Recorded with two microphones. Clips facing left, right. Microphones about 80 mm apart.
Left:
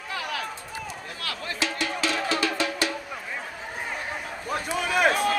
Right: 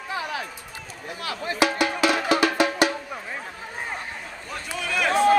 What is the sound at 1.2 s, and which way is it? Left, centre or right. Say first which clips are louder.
Speech: right 5 dB; right.